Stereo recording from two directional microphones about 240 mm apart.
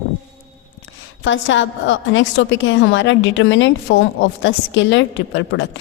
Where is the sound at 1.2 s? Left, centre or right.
Left.